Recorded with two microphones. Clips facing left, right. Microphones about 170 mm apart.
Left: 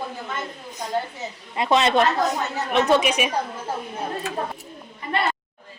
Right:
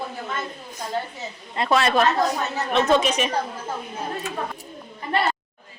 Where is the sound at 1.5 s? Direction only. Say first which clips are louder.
Left 1 dB; 15° left (ahead or behind).